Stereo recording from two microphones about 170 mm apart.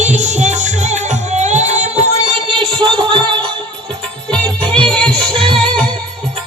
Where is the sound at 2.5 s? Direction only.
30° right (ahead or behind).